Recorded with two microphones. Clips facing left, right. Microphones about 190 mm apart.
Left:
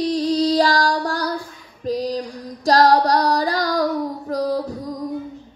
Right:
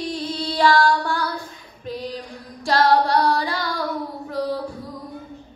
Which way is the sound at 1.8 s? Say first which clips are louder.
Left 7 dB; 40° left (ahead or behind).